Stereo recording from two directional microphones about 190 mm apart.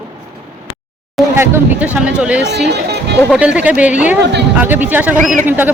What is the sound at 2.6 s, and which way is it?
Speech, 60° right (ahead or behind).